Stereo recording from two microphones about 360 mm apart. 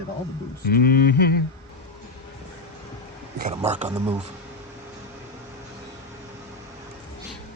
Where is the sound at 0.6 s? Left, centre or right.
Left.